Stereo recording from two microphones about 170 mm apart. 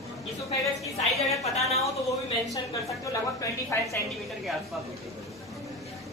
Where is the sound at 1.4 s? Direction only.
40° left (ahead or behind).